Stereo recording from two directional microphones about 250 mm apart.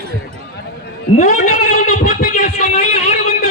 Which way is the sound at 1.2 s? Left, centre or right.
Left.